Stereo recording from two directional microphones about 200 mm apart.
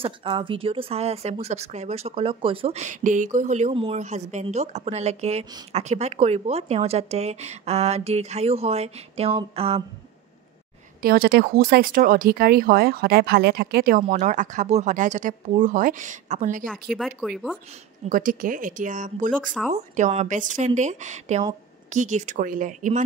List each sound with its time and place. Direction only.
0.0 s speech: 25° right (ahead or behind)
11.0 s speech: 50° right (ahead or behind)
14.0 s speech: 40° right (ahead or behind)
16.9 s speech: centre (ahead or behind)
18.0 s speech: 40° right (ahead or behind)